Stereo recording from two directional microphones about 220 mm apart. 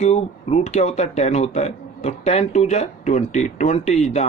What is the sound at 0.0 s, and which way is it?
Speech, 30° left (ahead or behind).